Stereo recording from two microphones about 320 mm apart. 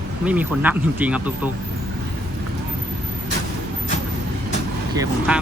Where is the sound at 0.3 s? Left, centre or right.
Centre.